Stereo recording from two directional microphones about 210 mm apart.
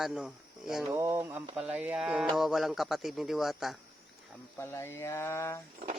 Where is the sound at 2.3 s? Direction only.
Centre (ahead or behind).